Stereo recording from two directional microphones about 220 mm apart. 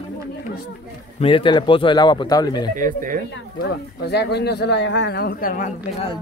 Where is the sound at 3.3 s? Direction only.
50° left (ahead or behind).